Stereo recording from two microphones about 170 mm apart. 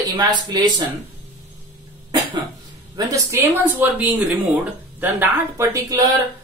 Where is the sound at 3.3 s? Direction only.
15° right (ahead or behind).